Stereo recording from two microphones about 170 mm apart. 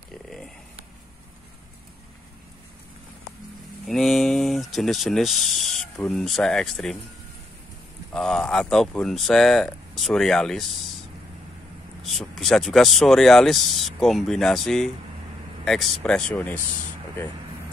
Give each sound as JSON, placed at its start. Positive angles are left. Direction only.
{"t": 3.8, "sound": "speech", "side_deg": 0}
{"t": 8.1, "sound": "speech", "side_deg": 5}
{"t": 12.0, "sound": "speech", "side_deg": 0}